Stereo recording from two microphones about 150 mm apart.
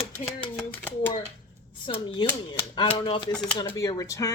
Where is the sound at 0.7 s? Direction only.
10° left (ahead or behind).